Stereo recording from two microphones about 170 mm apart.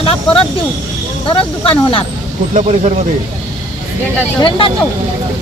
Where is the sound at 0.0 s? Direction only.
35° left (ahead or behind).